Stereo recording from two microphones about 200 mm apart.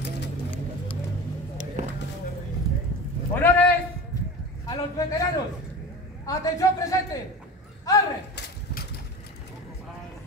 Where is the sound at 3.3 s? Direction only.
10° left (ahead or behind).